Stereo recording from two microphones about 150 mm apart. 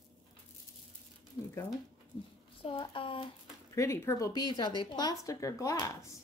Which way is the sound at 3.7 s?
20° left (ahead or behind).